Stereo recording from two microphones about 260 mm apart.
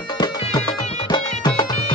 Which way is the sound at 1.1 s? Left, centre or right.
Centre.